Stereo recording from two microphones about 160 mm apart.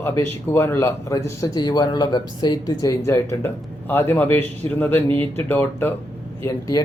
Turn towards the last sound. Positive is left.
turn(degrees=20)  # may be behind; listen again after turning